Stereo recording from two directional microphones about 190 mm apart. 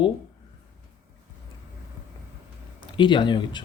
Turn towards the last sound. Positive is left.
turn(degrees=25)  # may be behind; listen again after turning